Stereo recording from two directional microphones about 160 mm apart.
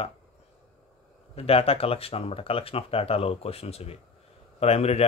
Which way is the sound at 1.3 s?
35° left (ahead or behind).